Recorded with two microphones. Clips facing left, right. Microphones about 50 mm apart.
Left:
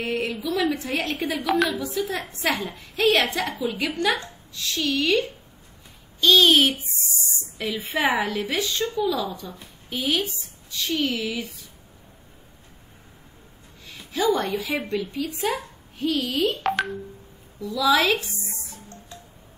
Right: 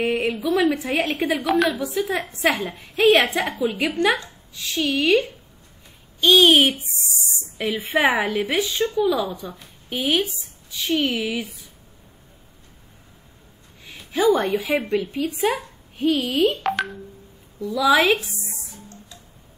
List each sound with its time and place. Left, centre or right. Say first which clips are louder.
0.0 s a sound: right 4 dB; centre
0.3 s a sound: right 4 dB; centre
0.8 s a woman's voice: right 4 dB; centre
1.1 s a woman's voice: right 4 dB; right
1.4 s a woman's voice: right 1 dB; centre
2.0 s a woman's voice: right 3 dB; right
6.2 s a woman's voice: right 2 dB; right
10.3 s a sound: even; centre
10.8 s a woman's voice: right 3 dB; centre
13.8 s a woman's voice: right 4 dB; right
15.0 s a woman's voice: right 4 dB; centre
16.6 s a woman's voice: even; centre
17.6 s a woman's voice: right 3 dB; centre
18.2 s a woman's voice: even; centre